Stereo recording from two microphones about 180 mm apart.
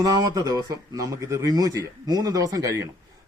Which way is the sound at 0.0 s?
20° right (ahead or behind).